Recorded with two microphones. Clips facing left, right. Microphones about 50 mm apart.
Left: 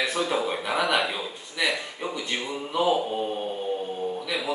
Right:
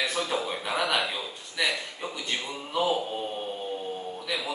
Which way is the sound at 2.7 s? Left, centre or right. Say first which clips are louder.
Left 3 dB; centre.